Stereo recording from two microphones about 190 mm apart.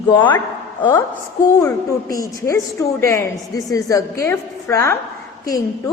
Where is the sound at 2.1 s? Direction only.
15° left (ahead or behind).